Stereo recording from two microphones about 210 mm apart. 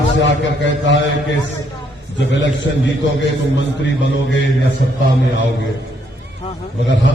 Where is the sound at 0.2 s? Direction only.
60° left (ahead or behind).